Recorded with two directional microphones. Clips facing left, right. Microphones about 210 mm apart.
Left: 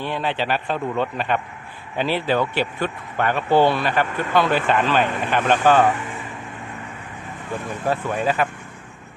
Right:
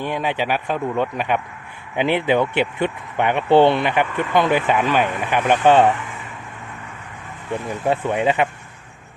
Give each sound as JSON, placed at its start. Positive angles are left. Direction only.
{"t": 0.0, "sound": "speech", "side_deg": -15}
{"t": 5.6, "sound": "speech", "side_deg": -25}
{"t": 7.7, "sound": "speech", "side_deg": -25}